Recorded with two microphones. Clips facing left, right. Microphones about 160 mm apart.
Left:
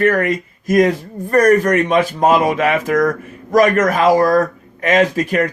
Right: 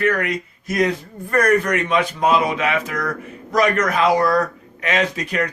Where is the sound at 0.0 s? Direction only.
45° left (ahead or behind).